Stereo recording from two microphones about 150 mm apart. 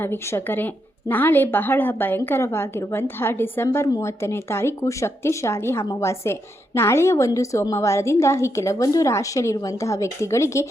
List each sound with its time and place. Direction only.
0.0 s a woman's voice: 15° left (ahead or behind)